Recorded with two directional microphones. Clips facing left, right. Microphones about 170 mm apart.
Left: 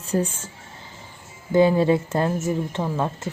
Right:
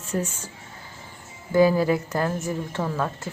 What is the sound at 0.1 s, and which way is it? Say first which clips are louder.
Speech: left 4 dB; 30° left (ahead or behind).